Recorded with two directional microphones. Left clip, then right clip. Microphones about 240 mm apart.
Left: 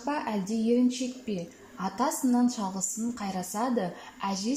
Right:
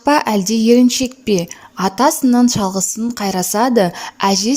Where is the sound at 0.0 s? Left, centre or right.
Right.